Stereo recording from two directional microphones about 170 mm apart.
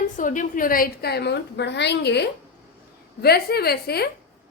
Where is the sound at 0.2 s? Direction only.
50° left (ahead or behind); by 2.2 s 80° left.